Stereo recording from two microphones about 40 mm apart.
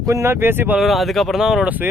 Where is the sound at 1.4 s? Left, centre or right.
Centre.